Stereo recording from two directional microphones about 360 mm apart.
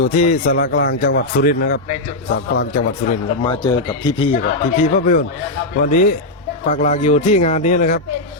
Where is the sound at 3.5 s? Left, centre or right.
Centre.